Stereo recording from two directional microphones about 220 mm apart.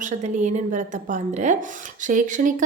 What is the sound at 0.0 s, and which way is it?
A woman's voice, 35° right (ahead or behind).